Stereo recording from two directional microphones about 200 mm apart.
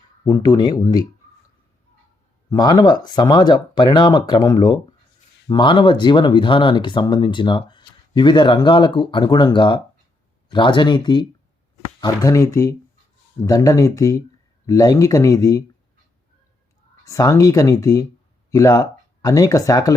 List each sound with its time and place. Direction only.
0.3 s speech: 20° left (ahead or behind)
2.5 s speech: 20° left (ahead or behind)
17.1 s speech: 15° left (ahead or behind)